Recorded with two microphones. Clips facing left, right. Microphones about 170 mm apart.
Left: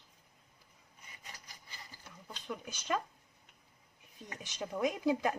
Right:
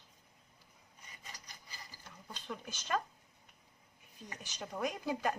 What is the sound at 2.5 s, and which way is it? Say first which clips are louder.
Speech: left 1 dB; 10° left (ahead or behind).